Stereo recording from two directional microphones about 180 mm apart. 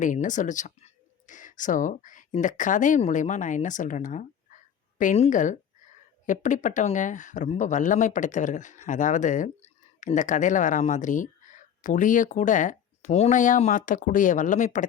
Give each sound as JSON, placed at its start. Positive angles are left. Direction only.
{"t": 0.0, "sound": "speech", "side_deg": 45}